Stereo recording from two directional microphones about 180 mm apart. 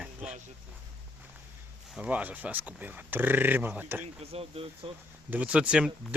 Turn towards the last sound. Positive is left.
turn(degrees=-5)  # may be behind; listen again after turning